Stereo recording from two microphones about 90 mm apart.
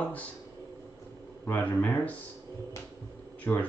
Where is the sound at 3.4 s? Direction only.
20° left (ahead or behind).